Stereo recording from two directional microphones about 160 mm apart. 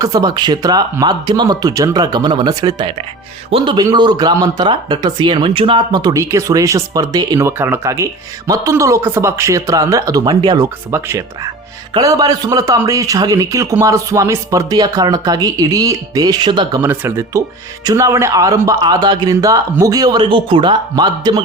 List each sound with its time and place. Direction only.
0.0 s a man's voice: 25° right (ahead or behind)
16.8 s a man's voice: 15° right (ahead or behind)